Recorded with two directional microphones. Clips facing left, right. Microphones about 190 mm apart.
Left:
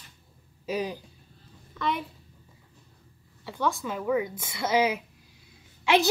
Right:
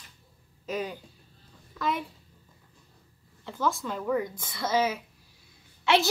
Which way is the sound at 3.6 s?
Centre (ahead or behind).